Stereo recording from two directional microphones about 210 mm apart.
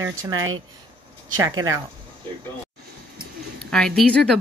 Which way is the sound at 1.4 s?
15° right (ahead or behind).